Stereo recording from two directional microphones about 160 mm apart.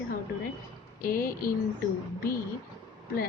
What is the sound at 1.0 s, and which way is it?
Speech, 65° left (ahead or behind).